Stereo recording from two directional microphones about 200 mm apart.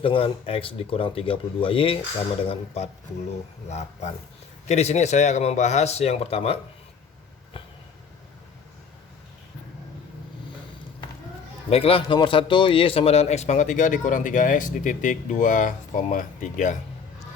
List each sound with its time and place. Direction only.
0.0 s speech: 25° left (ahead or behind)
11.7 s speech: 30° left (ahead or behind)